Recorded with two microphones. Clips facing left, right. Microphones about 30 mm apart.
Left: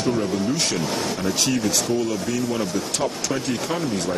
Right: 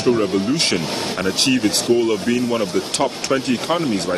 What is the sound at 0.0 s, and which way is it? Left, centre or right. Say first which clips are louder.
Speech: right 5 dB; right.